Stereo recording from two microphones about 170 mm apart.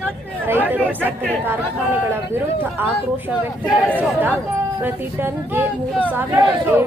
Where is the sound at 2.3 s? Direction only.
10° right (ahead or behind).